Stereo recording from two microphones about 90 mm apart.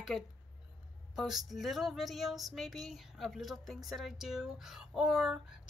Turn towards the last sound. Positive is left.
turn(degrees=-5)  # may be behind; listen again after turning